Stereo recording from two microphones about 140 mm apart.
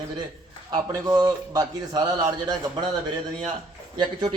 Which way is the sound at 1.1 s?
30° right (ahead or behind).